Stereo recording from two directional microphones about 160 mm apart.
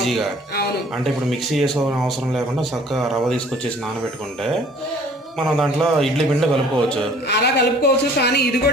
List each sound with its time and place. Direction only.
0.0 s speech: centre (ahead or behind)
1.5 s speech: centre (ahead or behind)
5.5 s speech: centre (ahead or behind)
7.3 s a woman's voice: 90° left